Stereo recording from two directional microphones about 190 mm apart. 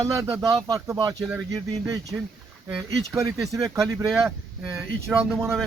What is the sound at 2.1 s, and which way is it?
Speech, 10° right (ahead or behind).